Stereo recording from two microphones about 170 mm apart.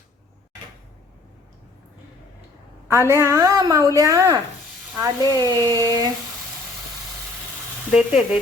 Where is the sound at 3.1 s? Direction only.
15° right (ahead or behind).